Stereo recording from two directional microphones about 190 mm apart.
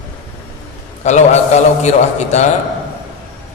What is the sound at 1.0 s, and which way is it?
A man's voice, 40° left (ahead or behind).